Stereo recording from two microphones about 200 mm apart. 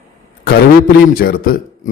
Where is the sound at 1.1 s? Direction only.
45° left (ahead or behind).